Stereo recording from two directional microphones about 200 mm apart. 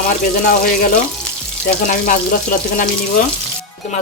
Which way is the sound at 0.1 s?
45° left (ahead or behind).